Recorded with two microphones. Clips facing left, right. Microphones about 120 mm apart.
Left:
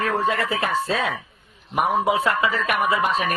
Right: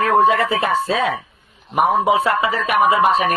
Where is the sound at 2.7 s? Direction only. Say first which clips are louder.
Right 10 dB; 50° right (ahead or behind).